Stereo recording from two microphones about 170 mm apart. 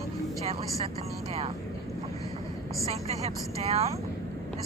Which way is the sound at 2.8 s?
40° right (ahead or behind).